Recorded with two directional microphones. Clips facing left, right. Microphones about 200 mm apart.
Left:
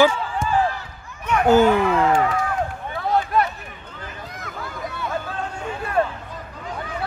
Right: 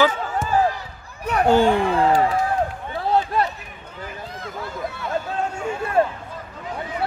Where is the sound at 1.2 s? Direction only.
35° right (ahead or behind).